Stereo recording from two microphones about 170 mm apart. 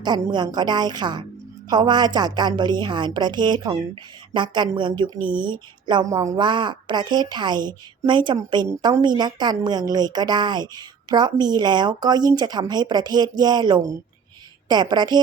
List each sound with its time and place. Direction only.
0.0 s a woman's voice: 25° right (ahead or behind)